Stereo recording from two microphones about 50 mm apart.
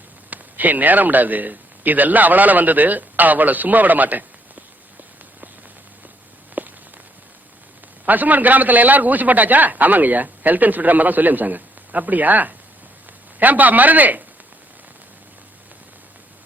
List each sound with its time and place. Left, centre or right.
0.3 s a man's voice: right
6.6 s walk: right
8.0 s a man's voice: right